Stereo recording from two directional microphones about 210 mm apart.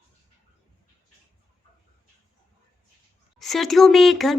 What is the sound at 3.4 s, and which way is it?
Speech, centre (ahead or behind).